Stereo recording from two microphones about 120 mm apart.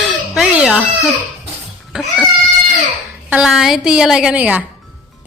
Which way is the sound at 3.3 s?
5° right (ahead or behind).